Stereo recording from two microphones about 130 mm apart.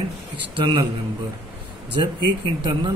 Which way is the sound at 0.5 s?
40° right (ahead or behind).